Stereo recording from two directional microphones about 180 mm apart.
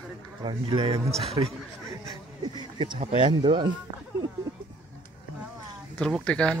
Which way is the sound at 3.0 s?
30° right (ahead or behind).